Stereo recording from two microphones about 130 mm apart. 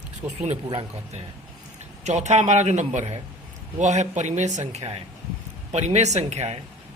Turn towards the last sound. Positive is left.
turn(degrees=-55)  # may be behind; listen again after turning